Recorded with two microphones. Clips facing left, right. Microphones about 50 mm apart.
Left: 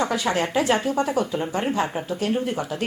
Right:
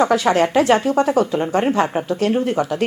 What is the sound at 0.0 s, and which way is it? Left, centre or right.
Speech, right.